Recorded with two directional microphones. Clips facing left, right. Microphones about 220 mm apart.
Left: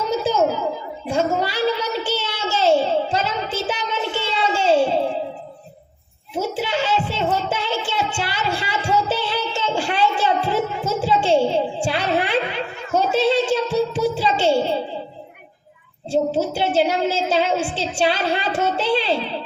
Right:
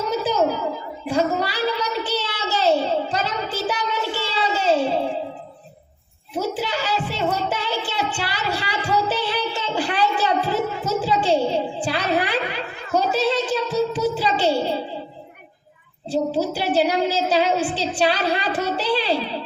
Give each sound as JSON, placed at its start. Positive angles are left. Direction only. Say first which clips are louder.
{"t": 0.1, "sound": "a sound", "louder": "left 2 dB", "side_deg": 25}
{"t": 6.3, "sound": "music", "louder": "left 1 dB", "side_deg": 25}
{"t": 16.0, "sound": "a woman's voice", "louder": "left 2 dB", "side_deg": 25}